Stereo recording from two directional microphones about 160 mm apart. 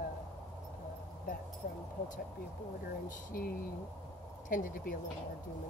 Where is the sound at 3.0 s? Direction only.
65° left (ahead or behind).